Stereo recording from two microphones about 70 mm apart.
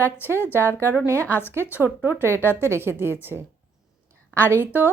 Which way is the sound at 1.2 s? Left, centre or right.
Left.